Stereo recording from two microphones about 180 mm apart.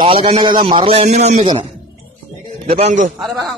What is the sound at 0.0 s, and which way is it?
A man's voice, 30° right (ahead or behind).